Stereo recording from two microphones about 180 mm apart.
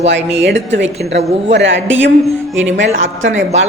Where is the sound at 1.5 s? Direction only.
85° right.